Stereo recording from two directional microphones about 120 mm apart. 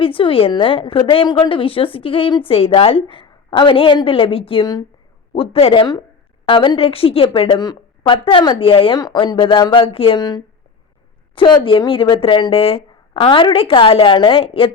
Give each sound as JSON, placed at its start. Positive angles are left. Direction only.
{"t": 0.0, "sound": "a woman's voice", "side_deg": 50}
{"t": 11.3, "sound": "a woman's voice", "side_deg": 45}